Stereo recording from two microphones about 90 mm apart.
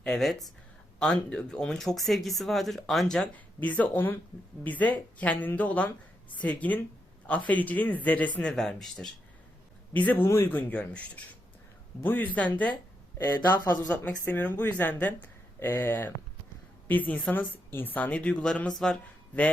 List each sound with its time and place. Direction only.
0.0 s speech: 5° left (ahead or behind)
3.3 s speech: 15° left (ahead or behind)
9.9 s a woman's voice: 20° left (ahead or behind)
13.1 s a woman's voice: 30° left (ahead or behind)
13.8 s a woman's voice: 15° left (ahead or behind)